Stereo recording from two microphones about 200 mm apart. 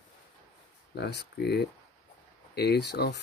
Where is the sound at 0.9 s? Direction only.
55° left (ahead or behind).